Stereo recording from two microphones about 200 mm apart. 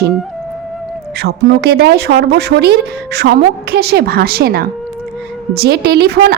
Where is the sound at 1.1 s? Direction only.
55° right (ahead or behind).